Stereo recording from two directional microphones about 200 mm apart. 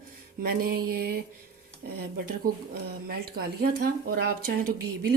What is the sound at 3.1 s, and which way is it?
Speech, 50° right (ahead or behind).